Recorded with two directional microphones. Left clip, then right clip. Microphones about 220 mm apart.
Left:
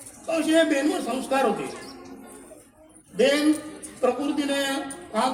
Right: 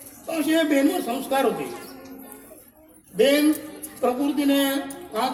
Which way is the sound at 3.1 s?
15° right (ahead or behind).